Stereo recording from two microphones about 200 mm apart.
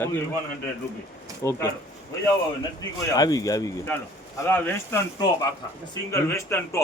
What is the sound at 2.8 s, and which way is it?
Speech, 20° left (ahead or behind).